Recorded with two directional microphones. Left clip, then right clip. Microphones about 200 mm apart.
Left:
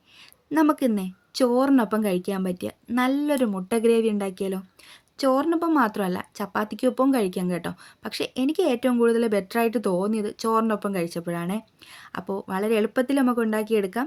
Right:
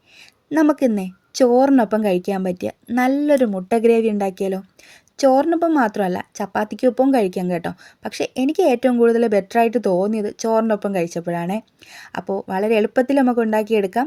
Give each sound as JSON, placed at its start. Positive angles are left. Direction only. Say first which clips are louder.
{"t": 0.5, "sound": "a woman's voice", "louder": "right 5 dB", "side_deg": -15}